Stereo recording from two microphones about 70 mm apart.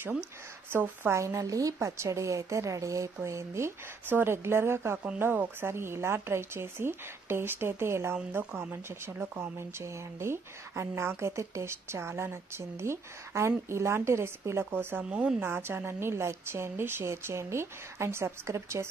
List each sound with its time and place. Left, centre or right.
0.7 s a woman's voice: right
1.2 s a woman's voice: right
15.0 s speech: centre
15.4 s a woman's voice: right